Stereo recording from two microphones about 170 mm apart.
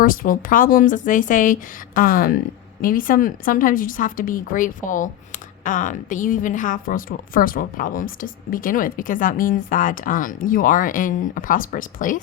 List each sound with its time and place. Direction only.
0.0 s a woman's voice: 55° left (ahead or behind)